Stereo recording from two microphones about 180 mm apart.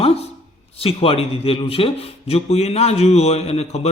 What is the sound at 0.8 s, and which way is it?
A man's voice, 30° left (ahead or behind).